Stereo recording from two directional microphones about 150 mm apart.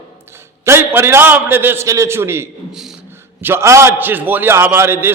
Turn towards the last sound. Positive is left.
turn(degrees=-15)  # may be behind; listen again after turning